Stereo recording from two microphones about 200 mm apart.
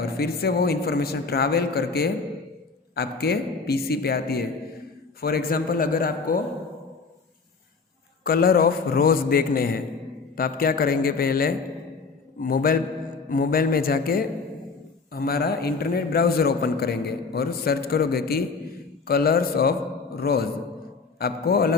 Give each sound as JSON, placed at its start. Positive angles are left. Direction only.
{"t": 0.0, "sound": "a man's voice", "side_deg": 50}
{"t": 8.2, "sound": "a man's voice", "side_deg": 45}